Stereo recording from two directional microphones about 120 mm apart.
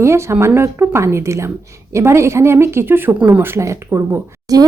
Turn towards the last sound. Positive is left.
turn(degrees=-30)  # may be behind; listen again after turning